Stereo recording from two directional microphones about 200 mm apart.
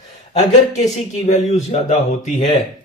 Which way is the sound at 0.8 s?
35° left (ahead or behind).